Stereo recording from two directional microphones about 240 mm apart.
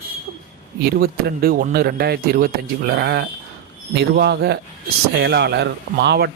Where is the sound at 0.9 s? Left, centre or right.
Right.